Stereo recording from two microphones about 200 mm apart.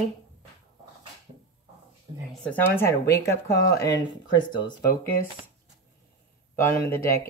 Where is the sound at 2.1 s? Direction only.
30° right (ahead or behind).